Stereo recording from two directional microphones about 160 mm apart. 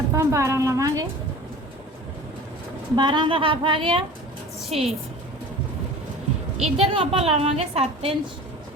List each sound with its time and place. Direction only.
0.1 s a woman's voice: 20° right (ahead or behind)
2.9 s a woman's voice: 30° right (ahead or behind)
4.7 s speech: centre (ahead or behind)
6.6 s a woman's voice: 40° right (ahead or behind)